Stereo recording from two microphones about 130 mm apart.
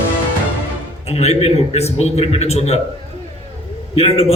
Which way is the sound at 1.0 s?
55° left (ahead or behind).